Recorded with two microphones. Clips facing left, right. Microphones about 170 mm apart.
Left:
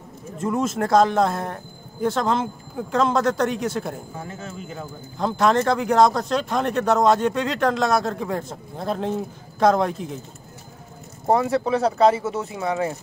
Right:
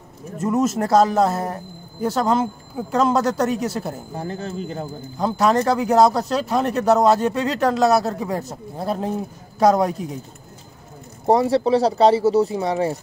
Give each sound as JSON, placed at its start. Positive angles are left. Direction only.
{"t": 0.4, "sound": "speech", "side_deg": -5}
{"t": 4.1, "sound": "speech", "side_deg": -35}
{"t": 5.4, "sound": "speech", "side_deg": -5}
{"t": 11.2, "sound": "speech", "side_deg": -30}